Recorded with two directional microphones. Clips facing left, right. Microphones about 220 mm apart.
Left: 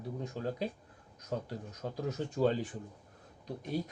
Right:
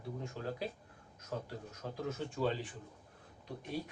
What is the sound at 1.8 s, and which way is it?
Speech, 40° left (ahead or behind).